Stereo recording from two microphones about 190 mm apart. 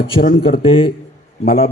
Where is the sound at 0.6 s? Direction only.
30° left (ahead or behind).